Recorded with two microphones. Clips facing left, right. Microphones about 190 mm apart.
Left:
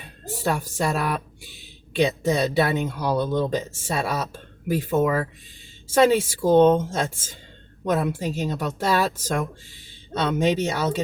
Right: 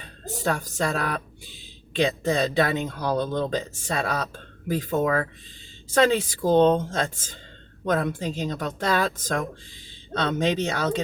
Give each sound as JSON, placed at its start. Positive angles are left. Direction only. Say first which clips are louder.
{"t": 0.0, "sound": "speech", "louder": "left 1 dB", "side_deg": 10}